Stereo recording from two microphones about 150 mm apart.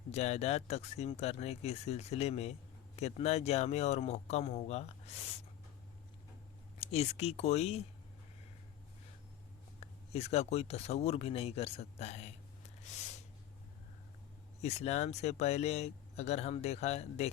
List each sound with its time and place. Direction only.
0.1 s speech: 45° left (ahead or behind)
6.7 s speech: 45° left (ahead or behind)
9.8 s speech: 45° left (ahead or behind)
14.6 s speech: 45° left (ahead or behind)